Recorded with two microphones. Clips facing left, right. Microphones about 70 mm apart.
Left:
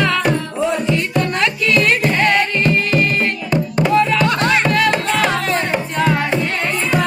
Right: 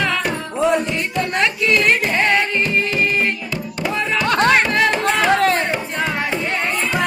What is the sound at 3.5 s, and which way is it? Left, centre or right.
Music, left.